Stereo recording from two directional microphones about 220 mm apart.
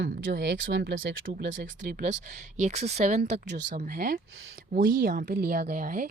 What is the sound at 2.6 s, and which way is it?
A woman's voice, 30° right (ahead or behind).